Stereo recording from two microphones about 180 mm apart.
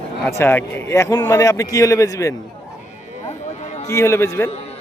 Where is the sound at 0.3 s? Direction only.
15° left (ahead or behind).